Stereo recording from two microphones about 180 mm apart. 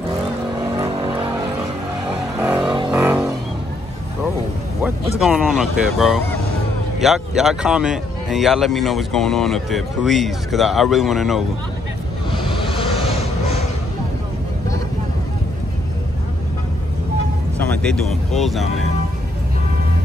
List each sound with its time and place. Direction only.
0.7 s vehicle: 20° right (ahead or behind)
2.3 s a sound: 10° right (ahead or behind)
2.9 s vehicle: 5° right (ahead or behind)
5.2 s speech: centre (ahead or behind)
12.3 s vehicle: 30° left (ahead or behind)
17.6 s speech: 5° left (ahead or behind)